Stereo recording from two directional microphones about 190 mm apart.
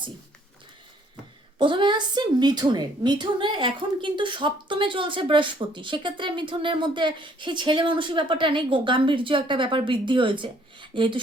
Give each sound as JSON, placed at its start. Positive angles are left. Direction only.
{"t": 1.5, "sound": "a woman's voice", "side_deg": -25}